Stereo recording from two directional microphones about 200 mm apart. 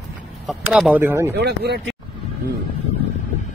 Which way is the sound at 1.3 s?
55° right (ahead or behind).